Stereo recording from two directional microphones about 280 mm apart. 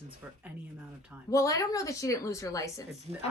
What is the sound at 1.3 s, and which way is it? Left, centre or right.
A woman's voice, centre.